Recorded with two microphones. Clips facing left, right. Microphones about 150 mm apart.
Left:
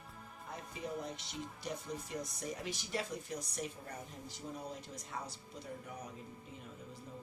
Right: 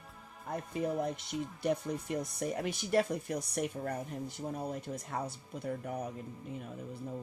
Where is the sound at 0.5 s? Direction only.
55° right (ahead or behind).